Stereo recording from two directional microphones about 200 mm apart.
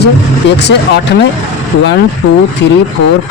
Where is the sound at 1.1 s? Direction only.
65° left (ahead or behind).